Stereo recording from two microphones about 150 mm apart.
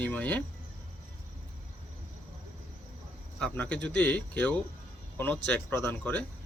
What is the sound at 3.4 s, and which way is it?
Speech, 10° left (ahead or behind).